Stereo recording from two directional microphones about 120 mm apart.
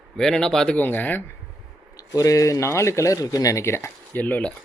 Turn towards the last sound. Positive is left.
turn(degrees=15)  # may be behind; listen again after turning